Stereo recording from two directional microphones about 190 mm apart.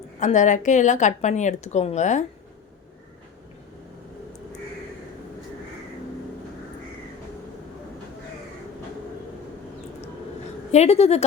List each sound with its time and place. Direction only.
0.2 s a woman's voice: 40° left (ahead or behind)
10.7 s a woman's voice: 35° left (ahead or behind)